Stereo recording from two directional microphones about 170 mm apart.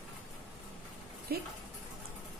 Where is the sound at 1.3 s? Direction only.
65° right (ahead or behind).